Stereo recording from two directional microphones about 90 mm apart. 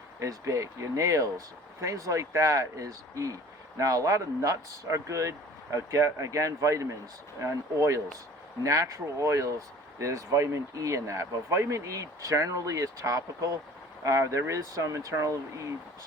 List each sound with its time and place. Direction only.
0.2 s speech: 35° right (ahead or behind)